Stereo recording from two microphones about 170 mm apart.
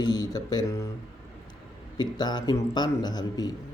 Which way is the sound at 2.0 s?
25° left (ahead or behind).